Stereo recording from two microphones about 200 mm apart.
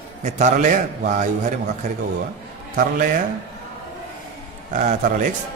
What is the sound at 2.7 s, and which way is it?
Speech, 40° right (ahead or behind).